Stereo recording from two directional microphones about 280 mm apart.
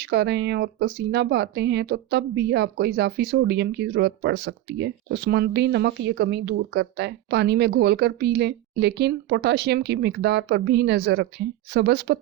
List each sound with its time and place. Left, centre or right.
0.0 s speech: right